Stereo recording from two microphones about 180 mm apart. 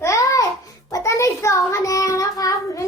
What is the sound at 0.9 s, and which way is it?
Child singing, 15° left (ahead or behind).